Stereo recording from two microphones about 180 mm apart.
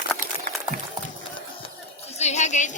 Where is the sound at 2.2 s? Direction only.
40° left (ahead or behind).